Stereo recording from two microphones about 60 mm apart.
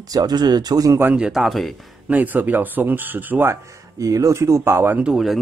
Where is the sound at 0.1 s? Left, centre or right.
Right.